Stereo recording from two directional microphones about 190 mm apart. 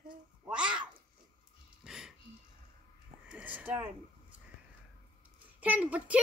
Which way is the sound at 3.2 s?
5° right (ahead or behind).